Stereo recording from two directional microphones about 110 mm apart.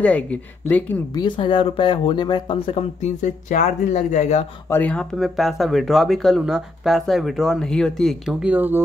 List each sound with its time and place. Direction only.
0.0 s speech: 10° left (ahead or behind)
1.1 s speech: 45° left (ahead or behind); by 4.5 s 90° left
4.6 s speech: 20° left (ahead or behind)
4.9 s speech: centre (ahead or behind)
8.5 s speech: 15° right (ahead or behind)